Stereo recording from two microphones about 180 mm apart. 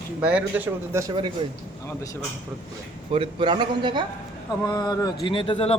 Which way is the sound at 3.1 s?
30° right (ahead or behind).